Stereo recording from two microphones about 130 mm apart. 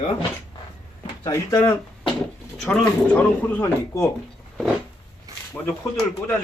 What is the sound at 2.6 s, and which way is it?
Speech, 10° left (ahead or behind).